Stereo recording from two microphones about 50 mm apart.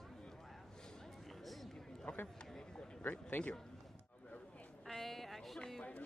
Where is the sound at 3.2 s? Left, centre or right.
Left.